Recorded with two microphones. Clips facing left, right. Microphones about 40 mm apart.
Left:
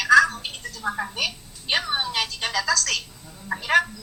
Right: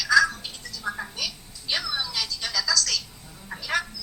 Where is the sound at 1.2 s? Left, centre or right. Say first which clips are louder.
Left 5 dB; left.